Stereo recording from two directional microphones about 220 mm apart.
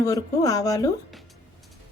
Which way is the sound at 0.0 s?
15° left (ahead or behind).